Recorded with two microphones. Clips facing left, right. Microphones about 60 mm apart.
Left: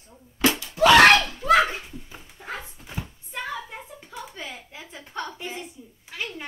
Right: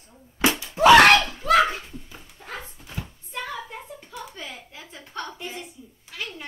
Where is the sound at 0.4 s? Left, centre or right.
Right.